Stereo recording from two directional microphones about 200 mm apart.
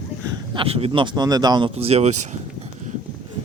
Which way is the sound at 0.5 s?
30° right (ahead or behind).